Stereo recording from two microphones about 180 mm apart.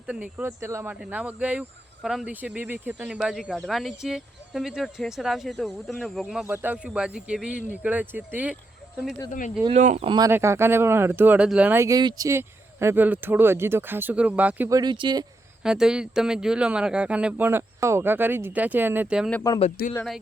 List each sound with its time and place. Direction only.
0.1 s speech: 10° right (ahead or behind)
9.7 s speech: 40° right (ahead or behind)
10.1 s speech: 20° right (ahead or behind)
14.7 s speech: 25° right (ahead or behind)
15.6 s speech: 5° right (ahead or behind)
19.8 s speech: 60° left (ahead or behind)